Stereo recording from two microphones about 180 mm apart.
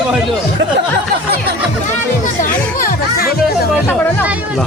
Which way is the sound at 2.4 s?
50° left (ahead or behind).